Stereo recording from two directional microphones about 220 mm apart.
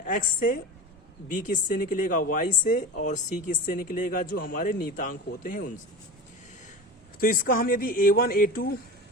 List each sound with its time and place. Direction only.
0.0 s speech: 40° left (ahead or behind)
7.2 s speech: 40° left (ahead or behind)